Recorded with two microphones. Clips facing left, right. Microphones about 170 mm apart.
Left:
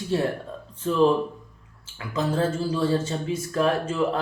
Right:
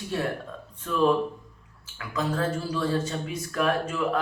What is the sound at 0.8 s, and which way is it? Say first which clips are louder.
A man's voice: left 3 dB; 30° left (ahead or behind).